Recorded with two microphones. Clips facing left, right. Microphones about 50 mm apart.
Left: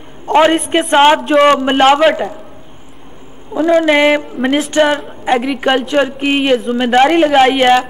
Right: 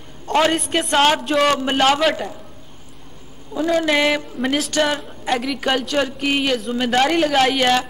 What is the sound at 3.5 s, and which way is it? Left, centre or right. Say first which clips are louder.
A man's voice: left 7 dB; left.